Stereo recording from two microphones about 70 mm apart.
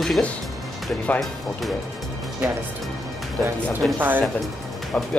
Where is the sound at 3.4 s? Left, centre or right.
Centre.